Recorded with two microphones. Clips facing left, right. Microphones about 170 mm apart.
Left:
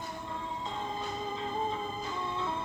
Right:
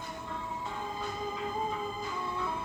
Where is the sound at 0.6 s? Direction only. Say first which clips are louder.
Left 2 dB; 25° left (ahead or behind).